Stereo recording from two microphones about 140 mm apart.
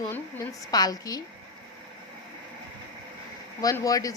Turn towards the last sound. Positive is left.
turn(degrees=25)  # may be behind; listen again after turning